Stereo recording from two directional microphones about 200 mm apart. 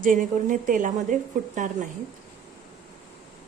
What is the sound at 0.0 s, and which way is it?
A woman's voice, 40° right (ahead or behind).